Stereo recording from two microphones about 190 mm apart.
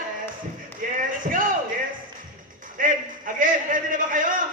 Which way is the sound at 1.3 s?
45° right (ahead or behind).